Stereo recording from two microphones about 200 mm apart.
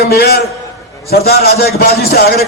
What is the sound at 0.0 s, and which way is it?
A man's voice, 55° left (ahead or behind).